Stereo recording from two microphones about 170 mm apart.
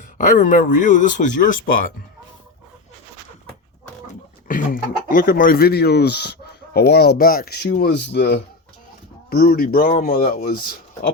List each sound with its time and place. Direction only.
0.2 s speech: 50° left (ahead or behind)
4.4 s speech: 55° left (ahead or behind)